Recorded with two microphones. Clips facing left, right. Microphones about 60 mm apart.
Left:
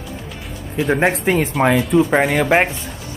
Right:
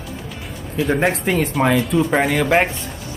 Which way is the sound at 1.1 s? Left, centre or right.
Centre.